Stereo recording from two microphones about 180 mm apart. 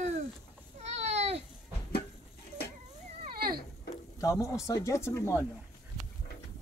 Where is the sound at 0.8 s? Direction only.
40° right (ahead or behind).